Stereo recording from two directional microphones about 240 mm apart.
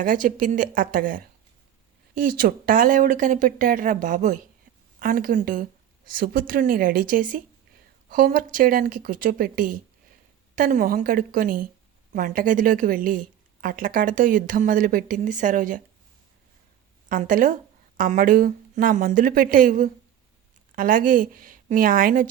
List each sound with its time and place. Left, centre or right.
0.0 s speech: right
17.1 s speech: right